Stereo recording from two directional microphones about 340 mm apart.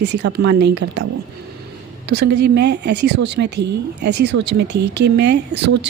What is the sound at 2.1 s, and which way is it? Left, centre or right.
A woman's voice, right.